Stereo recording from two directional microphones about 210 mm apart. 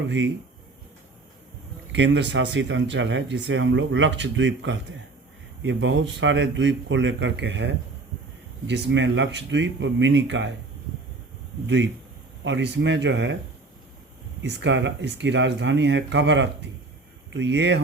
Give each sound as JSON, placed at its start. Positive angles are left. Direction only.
{"t": 1.9, "sound": "speech", "side_deg": -55}
{"t": 11.6, "sound": "speech", "side_deg": -60}
{"t": 14.4, "sound": "speech", "side_deg": -60}